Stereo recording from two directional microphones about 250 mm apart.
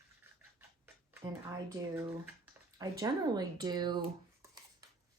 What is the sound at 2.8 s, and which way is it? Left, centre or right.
Speech, centre.